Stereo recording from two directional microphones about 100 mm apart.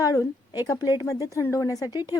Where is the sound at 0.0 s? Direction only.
35° left (ahead or behind).